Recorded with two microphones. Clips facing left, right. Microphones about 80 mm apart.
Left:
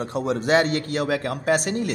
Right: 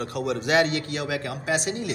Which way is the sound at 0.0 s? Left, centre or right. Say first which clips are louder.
Left 3 dB; left.